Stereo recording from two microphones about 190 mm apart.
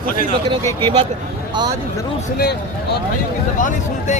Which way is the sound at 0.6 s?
15° left (ahead or behind).